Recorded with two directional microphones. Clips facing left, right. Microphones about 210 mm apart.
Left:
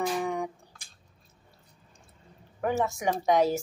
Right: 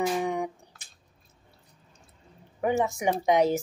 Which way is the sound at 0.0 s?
15° right (ahead or behind).